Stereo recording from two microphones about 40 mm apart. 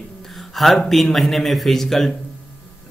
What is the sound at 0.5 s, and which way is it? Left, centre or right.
Speech, centre.